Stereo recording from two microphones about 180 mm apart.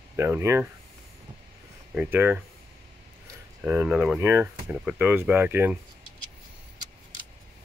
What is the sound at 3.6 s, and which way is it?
Speech, 10° right (ahead or behind).